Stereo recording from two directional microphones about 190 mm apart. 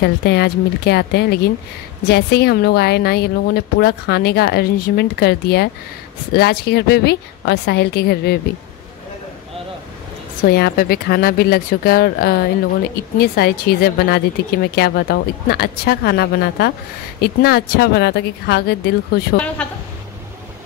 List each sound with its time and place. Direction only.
0.0 s speech: 60° left (ahead or behind)
10.4 s speech: 55° left (ahead or behind)
19.3 s a woman's voice: 5° left (ahead or behind)